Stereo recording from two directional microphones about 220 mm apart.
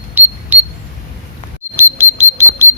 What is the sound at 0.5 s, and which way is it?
Cash register, 10° right (ahead or behind).